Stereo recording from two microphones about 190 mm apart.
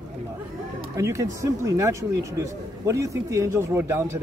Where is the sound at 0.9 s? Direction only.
15° right (ahead or behind).